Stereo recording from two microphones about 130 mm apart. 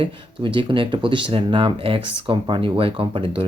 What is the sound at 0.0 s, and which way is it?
Speech, 40° right (ahead or behind).